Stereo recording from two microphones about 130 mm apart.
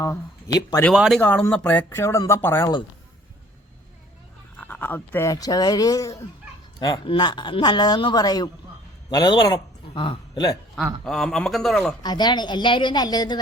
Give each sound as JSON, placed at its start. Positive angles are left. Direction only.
{"t": 0.0, "sound": "a man's voice", "side_deg": 25}
{"t": 0.9, "sound": "a man's voice", "side_deg": -5}
{"t": 1.2, "sound": "speech", "side_deg": 15}
{"t": 4.5, "sound": "a man's voice", "side_deg": 15}
{"t": 11.0, "sound": "a man's voice", "side_deg": 0}
{"t": 12.0, "sound": "speech", "side_deg": 35}